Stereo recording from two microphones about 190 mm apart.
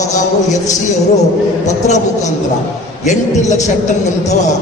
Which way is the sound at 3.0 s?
40° left (ahead or behind).